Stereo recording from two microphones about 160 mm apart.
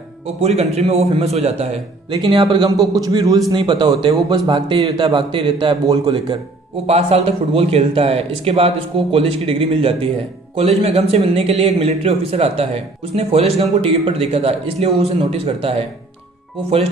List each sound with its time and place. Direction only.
0.4 s a man's voice: 40° right (ahead or behind)
6.9 s a man's voice: 40° right (ahead or behind)